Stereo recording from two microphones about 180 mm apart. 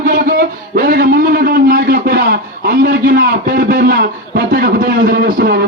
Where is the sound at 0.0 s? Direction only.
55° right (ahead or behind).